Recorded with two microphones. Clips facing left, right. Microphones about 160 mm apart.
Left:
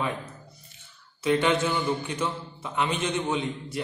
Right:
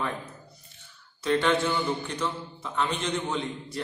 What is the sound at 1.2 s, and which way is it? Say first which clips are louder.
A man's voice: left 1 dB; 10° left (ahead or behind).